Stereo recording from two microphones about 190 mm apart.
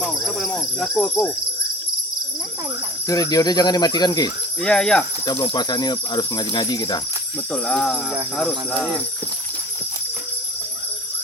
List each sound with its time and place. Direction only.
0.0 s cricket: centre (ahead or behind)
3.1 s speech: 20° left (ahead or behind)
4.6 s speech: 5° left (ahead or behind)
5.2 s speech: 25° left (ahead or behind)
7.5 s speech: 5° left (ahead or behind)